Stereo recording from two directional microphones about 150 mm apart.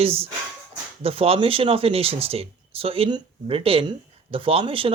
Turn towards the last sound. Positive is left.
turn(degrees=-35)  # may be behind; listen again after turning